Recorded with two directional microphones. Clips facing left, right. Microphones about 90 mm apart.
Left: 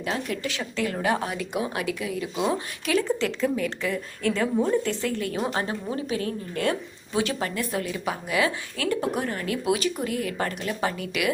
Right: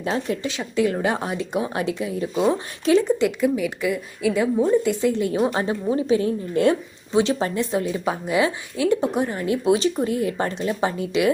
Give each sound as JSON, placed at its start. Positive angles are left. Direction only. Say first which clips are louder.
{"t": 0.0, "sound": "a woman's voice", "louder": "right 4 dB", "side_deg": -25}
{"t": 3.0, "sound": "a woman's voice", "louder": "right 5 dB", "side_deg": -15}
{"t": 4.8, "sound": "a woman's voice", "louder": "right 6 dB", "side_deg": -15}